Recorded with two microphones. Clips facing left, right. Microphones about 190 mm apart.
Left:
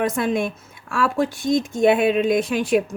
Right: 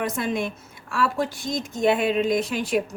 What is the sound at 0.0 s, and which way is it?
A woman's voice, 55° left (ahead or behind).